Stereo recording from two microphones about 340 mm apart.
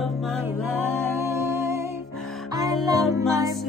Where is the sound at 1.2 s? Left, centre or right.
Centre.